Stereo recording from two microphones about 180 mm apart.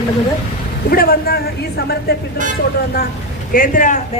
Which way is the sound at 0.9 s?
55° left (ahead or behind).